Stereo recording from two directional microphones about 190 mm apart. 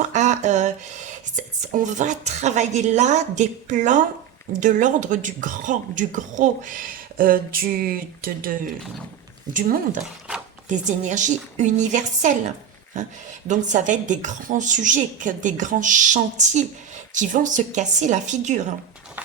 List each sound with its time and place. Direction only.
0.1 s a woman's voice: 40° right (ahead or behind)